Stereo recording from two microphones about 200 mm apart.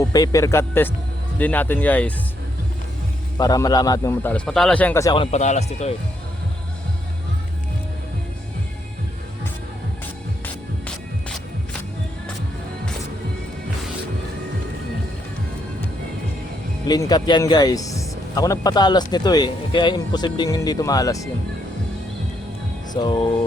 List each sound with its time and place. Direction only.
0.0 s a man's voice: 20° left (ahead or behind)
3.3 s a man's voice: 20° left (ahead or behind)
5.1 s speech: 30° left (ahead or behind)
10.4 s music: 5° left (ahead or behind)
16.8 s speech: 20° left (ahead or behind)
22.9 s speech: 20° left (ahead or behind)